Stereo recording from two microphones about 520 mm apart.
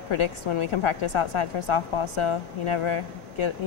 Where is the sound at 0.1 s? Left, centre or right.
Left.